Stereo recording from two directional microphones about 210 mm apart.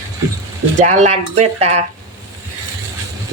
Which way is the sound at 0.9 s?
35° right (ahead or behind).